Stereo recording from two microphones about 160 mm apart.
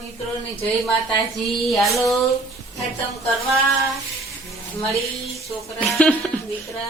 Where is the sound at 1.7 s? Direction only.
Centre (ahead or behind).